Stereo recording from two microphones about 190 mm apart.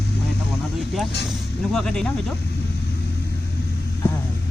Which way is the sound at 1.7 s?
5° left (ahead or behind).